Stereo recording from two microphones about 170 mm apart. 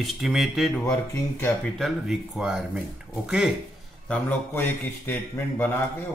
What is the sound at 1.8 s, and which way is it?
Speech, 5° right (ahead or behind).